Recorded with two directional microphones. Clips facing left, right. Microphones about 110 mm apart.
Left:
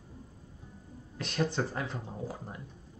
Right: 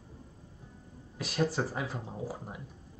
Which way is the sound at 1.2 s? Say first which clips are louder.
Right 1 dB; 5° right (ahead or behind).